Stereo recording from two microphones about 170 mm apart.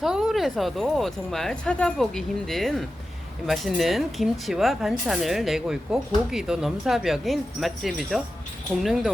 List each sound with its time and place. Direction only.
0.0 s speech: centre (ahead or behind)